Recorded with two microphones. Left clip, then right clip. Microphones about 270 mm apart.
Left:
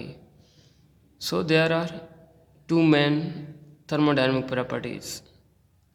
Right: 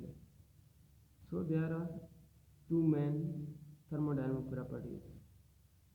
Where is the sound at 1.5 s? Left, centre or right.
Left.